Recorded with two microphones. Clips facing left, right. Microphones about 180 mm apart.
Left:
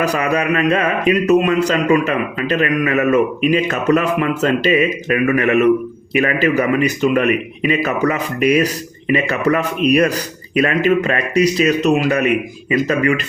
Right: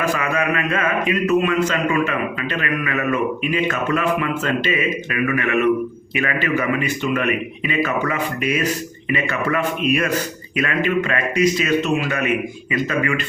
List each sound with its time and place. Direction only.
0.0 s mantra: 40° left (ahead or behind)